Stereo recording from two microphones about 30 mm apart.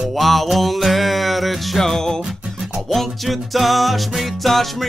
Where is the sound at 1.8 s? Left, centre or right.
Centre.